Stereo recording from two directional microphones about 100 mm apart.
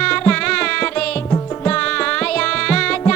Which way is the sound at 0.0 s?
10° left (ahead or behind).